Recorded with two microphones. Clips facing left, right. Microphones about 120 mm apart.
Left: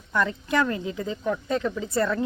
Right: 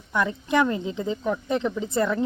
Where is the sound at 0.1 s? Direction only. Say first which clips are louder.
Right 1 dB; 15° right (ahead or behind).